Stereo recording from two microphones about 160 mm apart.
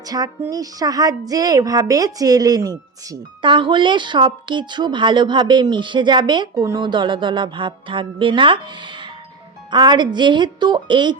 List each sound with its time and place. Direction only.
0.1 s speech: 25° right (ahead or behind)
6.5 s music: 20° right (ahead or behind)
9.6 s speech: 30° right (ahead or behind)